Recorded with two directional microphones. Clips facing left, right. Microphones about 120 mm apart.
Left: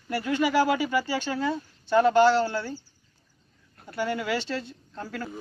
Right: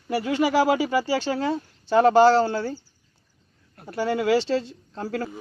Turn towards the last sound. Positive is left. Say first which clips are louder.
# right 6 dB
turn(degrees=-35)  # may be behind; listen again after turning